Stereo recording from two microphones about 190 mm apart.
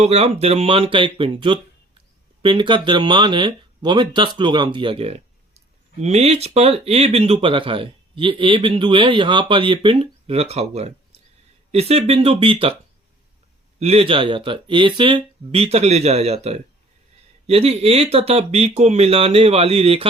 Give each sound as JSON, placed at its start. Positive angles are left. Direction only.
{"t": 0.0, "sound": "speech", "side_deg": -35}
{"t": 13.7, "sound": "speech", "side_deg": -35}